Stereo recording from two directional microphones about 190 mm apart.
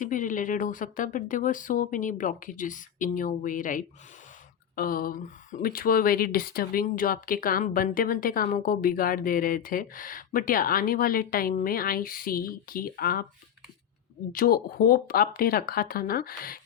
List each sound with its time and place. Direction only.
0.0 s speech: 45° left (ahead or behind)
14.3 s speech: 50° left (ahead or behind)